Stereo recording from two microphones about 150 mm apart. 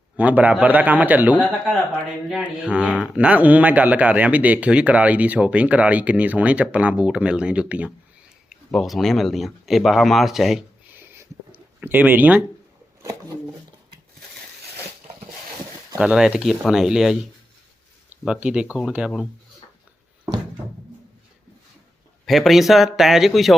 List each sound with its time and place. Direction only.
0.2 s speech: 10° right (ahead or behind)
10.9 s a sound: 15° right (ahead or behind)
11.8 s speech: 10° right (ahead or behind)
13.0 s a sound: 20° right (ahead or behind)
16.0 s speech: 5° right (ahead or behind)
22.3 s speech: centre (ahead or behind)